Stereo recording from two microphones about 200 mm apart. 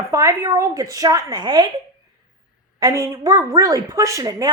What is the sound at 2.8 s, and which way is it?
Speech, 15° right (ahead or behind).